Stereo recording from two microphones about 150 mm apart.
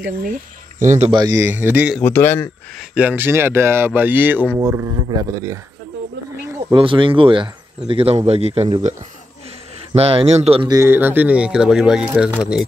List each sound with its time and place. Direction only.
0.7 s a man's voice: 50° right (ahead or behind)
1.1 s speech: 20° right (ahead or behind)
2.0 s a man's voice: 15° left (ahead or behind)
2.9 s speech: 10° right (ahead or behind)
6.7 s a man's voice: 35° right (ahead or behind)
9.9 s a man's voice: 40° right (ahead or behind)
10.7 s speech: 15° right (ahead or behind)